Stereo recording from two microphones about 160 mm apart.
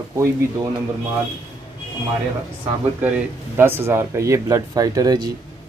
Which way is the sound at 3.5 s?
15° right (ahead or behind).